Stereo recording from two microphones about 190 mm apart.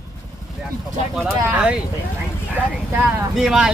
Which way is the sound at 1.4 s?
5° right (ahead or behind).